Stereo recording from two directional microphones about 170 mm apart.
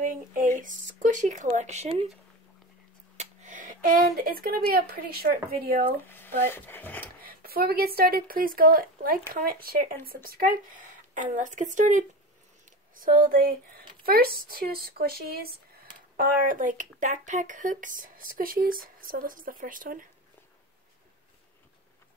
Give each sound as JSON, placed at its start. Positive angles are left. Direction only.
{"t": 0.0, "sound": "speech", "side_deg": -50}
{"t": 3.2, "sound": "a sound", "side_deg": -50}
{"t": 4.2, "sound": "speech", "side_deg": -60}
{"t": 6.0, "sound": "speech", "side_deg": 10}
{"t": 7.2, "sound": "speech", "side_deg": -60}